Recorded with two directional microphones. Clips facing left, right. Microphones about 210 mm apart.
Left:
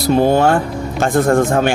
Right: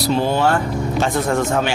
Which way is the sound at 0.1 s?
50° left (ahead or behind).